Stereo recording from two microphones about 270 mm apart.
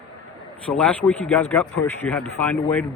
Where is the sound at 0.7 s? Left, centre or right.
Centre.